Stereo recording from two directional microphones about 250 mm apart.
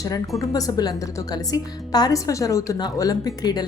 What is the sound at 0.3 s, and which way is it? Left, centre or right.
A woman's voice, centre.